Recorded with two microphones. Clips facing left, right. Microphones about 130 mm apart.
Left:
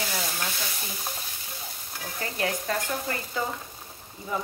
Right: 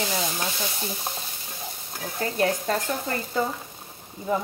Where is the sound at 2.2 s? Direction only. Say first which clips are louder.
Right 6 dB; 35° right (ahead or behind).